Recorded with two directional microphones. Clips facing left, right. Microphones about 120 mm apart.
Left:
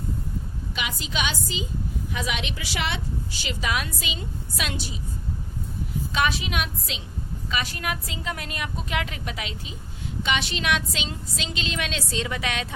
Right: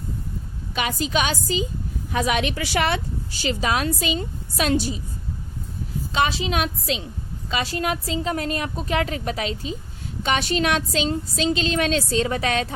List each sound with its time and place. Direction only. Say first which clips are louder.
0.8 s a woman's voice: right 7 dB; 45° right (ahead or behind)
3.4 s a woman's voice: right 7 dB; 35° right (ahead or behind)
6.1 s a woman's voice: right 4 dB; 30° right (ahead or behind)